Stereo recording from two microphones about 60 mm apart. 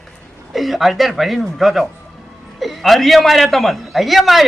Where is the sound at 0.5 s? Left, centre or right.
Centre.